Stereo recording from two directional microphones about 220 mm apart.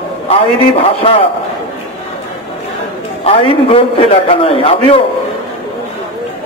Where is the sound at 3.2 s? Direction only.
25° left (ahead or behind).